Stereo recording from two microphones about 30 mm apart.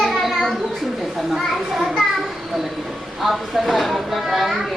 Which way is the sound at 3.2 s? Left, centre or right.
Centre.